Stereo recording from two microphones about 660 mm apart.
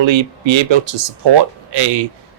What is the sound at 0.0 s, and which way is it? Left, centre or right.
Speech, right.